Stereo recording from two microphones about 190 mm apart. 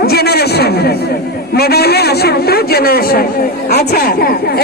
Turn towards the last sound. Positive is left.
turn(degrees=55)  # may be behind; listen again after turning